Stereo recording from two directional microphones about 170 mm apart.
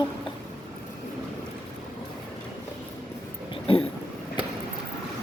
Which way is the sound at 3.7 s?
30° left (ahead or behind).